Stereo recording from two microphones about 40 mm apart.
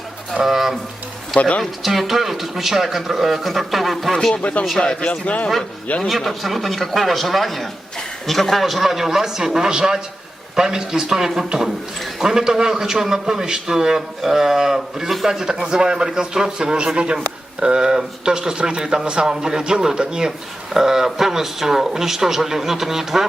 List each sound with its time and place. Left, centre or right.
0.4 s speech: centre
1.4 s speech: left
1.8 s speech: centre
4.8 s speech: left
5.2 s speech: left
6.0 s a man's voice: centre